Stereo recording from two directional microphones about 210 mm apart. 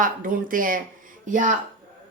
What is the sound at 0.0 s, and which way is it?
A woman's voice, 40° right (ahead or behind).